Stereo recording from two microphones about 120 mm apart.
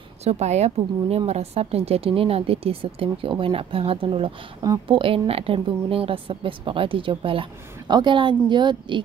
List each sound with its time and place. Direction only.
0.2 s a woman's voice: 65° right (ahead or behind); by 9.0 s 40° right (ahead or behind)